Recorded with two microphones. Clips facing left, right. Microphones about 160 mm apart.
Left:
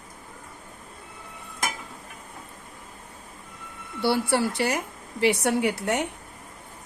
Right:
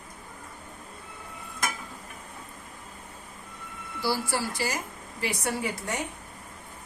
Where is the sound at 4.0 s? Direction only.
60° left (ahead or behind).